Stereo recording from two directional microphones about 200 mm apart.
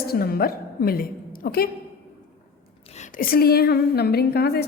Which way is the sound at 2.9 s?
40° left (ahead or behind).